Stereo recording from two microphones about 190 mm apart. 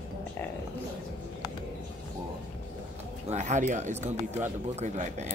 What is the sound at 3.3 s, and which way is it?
Speech, 35° right (ahead or behind).